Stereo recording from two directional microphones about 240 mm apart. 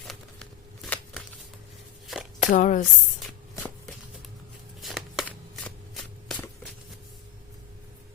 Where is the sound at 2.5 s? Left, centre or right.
Left.